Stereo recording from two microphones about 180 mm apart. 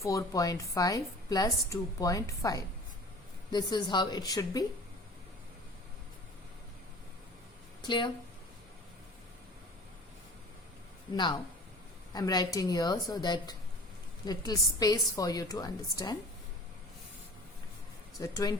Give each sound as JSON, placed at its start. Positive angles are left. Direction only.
{"t": 0.0, "sound": "a woman's voice", "side_deg": 20}
{"t": 7.8, "sound": "speech", "side_deg": 25}
{"t": 11.1, "sound": "a woman's voice", "side_deg": 25}
{"t": 18.2, "sound": "speech", "side_deg": 20}